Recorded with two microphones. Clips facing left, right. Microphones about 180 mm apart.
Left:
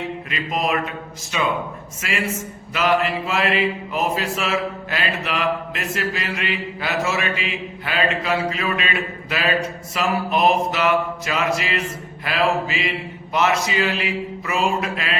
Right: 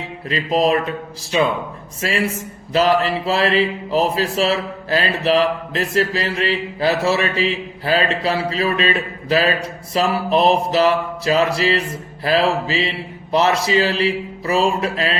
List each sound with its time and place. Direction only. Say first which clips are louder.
0.3 s speech: right 8 dB; 35° right (ahead or behind)